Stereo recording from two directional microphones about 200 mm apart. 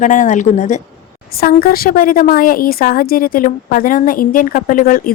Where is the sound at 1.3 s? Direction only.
50° left (ahead or behind).